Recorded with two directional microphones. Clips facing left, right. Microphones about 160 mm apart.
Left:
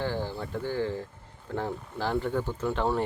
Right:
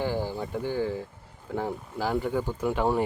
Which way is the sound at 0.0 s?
10° right (ahead or behind).